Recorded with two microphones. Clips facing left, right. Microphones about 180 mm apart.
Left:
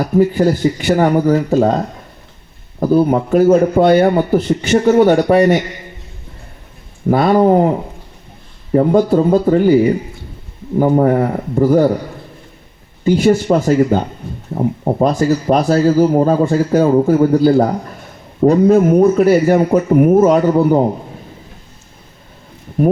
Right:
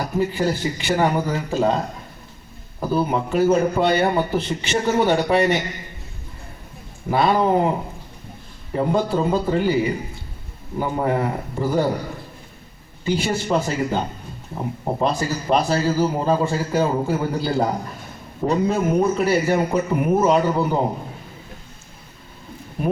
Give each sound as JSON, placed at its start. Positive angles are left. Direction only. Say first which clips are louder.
{"t": 0.2, "sound": "speech", "louder": "left 9 dB", "side_deg": 45}
{"t": 2.8, "sound": "speech", "louder": "left 9 dB", "side_deg": 45}
{"t": 7.1, "sound": "speech", "louder": "left 7 dB", "side_deg": 45}
{"t": 8.7, "sound": "speech", "louder": "left 9 dB", "side_deg": 45}
{"t": 13.1, "sound": "speech", "louder": "left 10 dB", "side_deg": 45}